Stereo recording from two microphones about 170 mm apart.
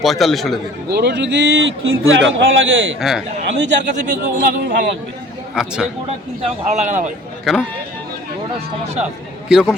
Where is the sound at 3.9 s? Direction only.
55° right (ahead or behind); by 5.0 s 75° right (ahead or behind).